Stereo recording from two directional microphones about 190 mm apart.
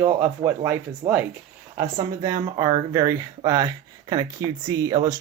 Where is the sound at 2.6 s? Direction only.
20° right (ahead or behind).